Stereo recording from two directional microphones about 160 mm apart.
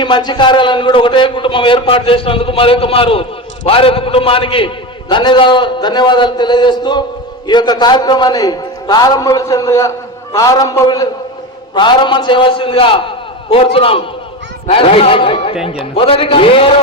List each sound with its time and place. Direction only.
0.0 s a man's voice: 30° left (ahead or behind)